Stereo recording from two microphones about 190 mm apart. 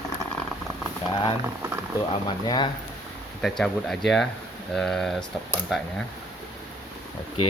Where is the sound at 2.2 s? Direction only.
20° left (ahead or behind).